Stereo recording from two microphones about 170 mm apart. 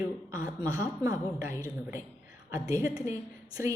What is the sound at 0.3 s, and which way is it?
A woman's voice, 15° right (ahead or behind).